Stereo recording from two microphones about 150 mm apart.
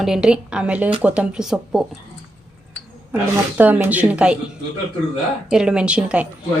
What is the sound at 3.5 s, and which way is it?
Speech, 10° right (ahead or behind).